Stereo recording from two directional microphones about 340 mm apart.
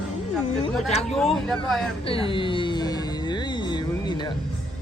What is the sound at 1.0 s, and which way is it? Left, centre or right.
Speech, centre.